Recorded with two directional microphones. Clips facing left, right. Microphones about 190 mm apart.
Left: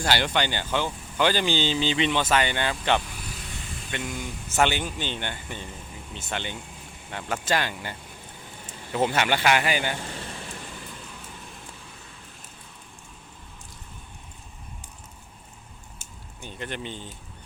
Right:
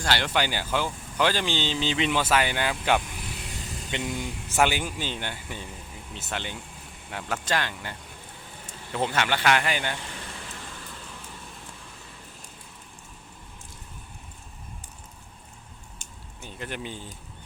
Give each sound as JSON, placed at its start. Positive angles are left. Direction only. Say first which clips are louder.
{"t": 0.0, "sound": "speech", "louder": "left 1 dB", "side_deg": 0}
{"t": 3.9, "sound": "speech", "louder": "right 2 dB", "side_deg": -20}
{"t": 4.5, "sound": "speech", "louder": "even", "side_deg": -5}
{"t": 16.0, "sound": "a sound", "louder": "left 2 dB", "side_deg": 0}